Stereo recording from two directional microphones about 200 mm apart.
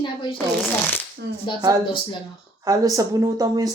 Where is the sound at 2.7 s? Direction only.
15° right (ahead or behind).